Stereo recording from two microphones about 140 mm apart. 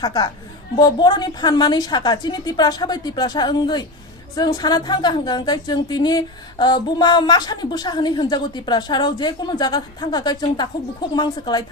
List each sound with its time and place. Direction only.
0.0 s a woman's voice: 30° left (ahead or behind)